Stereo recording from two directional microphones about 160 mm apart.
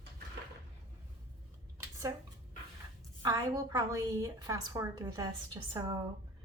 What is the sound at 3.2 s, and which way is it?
A woman's voice, 25° right (ahead or behind).